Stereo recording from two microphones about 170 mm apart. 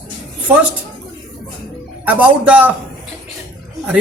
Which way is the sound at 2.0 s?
10° right (ahead or behind).